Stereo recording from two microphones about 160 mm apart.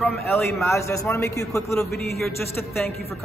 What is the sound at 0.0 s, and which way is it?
A man's voice, 15° left (ahead or behind).